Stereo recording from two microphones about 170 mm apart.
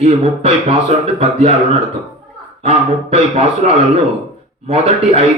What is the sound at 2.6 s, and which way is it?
Speech, 40° right (ahead or behind).